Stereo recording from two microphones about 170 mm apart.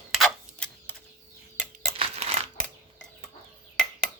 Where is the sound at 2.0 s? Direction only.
35° right (ahead or behind).